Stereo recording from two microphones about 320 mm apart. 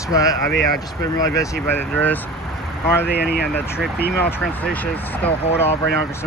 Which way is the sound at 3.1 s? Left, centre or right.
Left.